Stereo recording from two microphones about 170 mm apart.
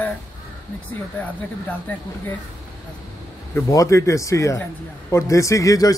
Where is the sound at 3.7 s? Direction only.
20° left (ahead or behind).